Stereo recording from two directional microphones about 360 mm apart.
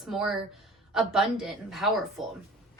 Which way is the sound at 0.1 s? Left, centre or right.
Centre.